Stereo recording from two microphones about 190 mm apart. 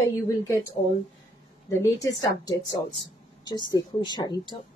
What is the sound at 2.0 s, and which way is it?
A woman's voice, 15° left (ahead or behind).